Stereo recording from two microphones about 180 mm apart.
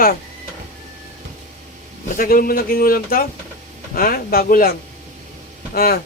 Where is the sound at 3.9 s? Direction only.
55° left (ahead or behind).